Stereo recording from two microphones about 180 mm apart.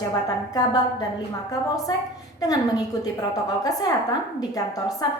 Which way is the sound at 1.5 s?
20° left (ahead or behind).